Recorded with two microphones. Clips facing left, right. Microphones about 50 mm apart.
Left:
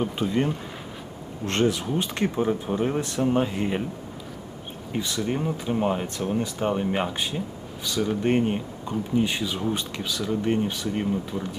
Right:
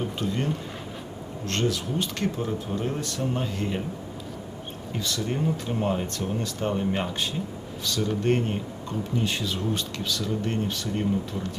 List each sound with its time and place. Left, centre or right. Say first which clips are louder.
0.0 s speech: left 4 dB; centre
4.9 s speech: left 3 dB; centre